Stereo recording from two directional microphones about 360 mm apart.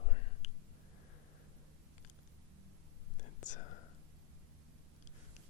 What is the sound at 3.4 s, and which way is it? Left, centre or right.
Whispering, centre.